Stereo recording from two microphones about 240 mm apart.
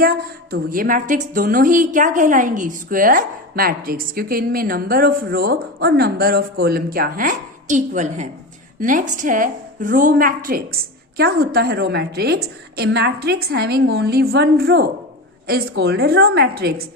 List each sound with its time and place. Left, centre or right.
0.7 s a woman's voice: right